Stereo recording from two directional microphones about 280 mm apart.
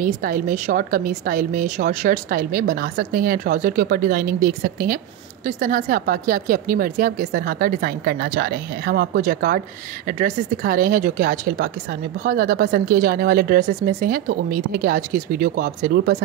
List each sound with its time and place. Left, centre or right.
0.0 s speech: right